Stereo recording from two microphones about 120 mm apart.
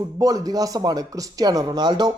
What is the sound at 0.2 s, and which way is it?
Speech, 30° right (ahead or behind).